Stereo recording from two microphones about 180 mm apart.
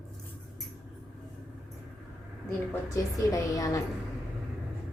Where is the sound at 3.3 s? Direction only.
15° left (ahead or behind).